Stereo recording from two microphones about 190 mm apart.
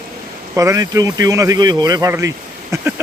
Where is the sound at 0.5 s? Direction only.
15° right (ahead or behind).